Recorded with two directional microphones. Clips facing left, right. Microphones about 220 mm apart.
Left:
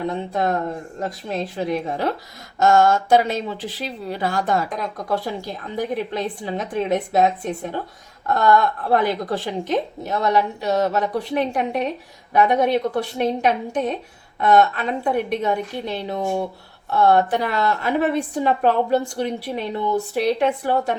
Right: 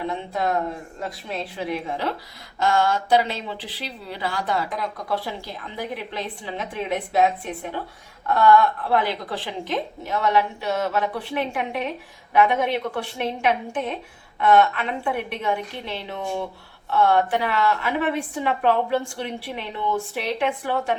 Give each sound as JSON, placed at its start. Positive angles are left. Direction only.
{"t": 0.1, "sound": "a woman's voice", "side_deg": 45}